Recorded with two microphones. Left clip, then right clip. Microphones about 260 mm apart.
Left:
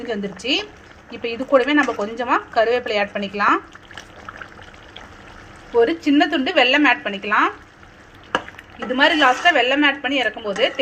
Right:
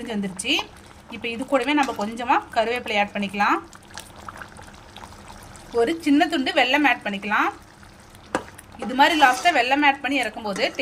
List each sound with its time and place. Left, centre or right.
1.1 s speech: centre
5.7 s speech: centre
8.9 s speech: centre